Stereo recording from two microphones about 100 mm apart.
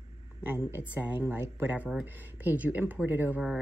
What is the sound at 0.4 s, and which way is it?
Speech, 20° right (ahead or behind).